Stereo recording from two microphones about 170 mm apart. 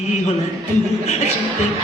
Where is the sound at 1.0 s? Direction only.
40° left (ahead or behind).